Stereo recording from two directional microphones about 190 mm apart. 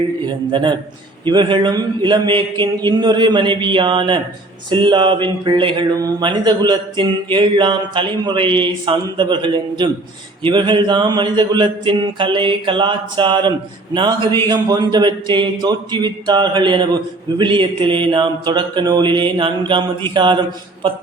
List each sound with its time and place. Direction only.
0.5 s speech: 25° right (ahead or behind)